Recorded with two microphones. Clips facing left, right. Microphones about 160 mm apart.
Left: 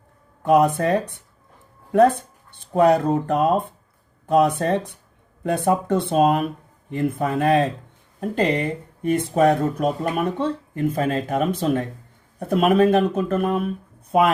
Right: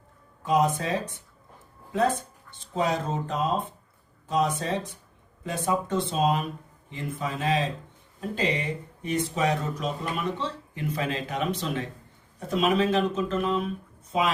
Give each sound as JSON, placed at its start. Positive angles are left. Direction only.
{"t": 0.4, "sound": "speech", "side_deg": 60}